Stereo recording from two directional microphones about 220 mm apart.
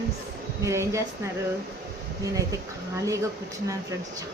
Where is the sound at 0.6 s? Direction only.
15° right (ahead or behind).